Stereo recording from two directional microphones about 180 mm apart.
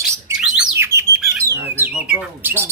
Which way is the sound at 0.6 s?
15° right (ahead or behind).